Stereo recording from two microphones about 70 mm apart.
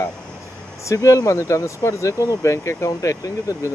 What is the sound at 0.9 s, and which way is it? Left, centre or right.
Speech, left.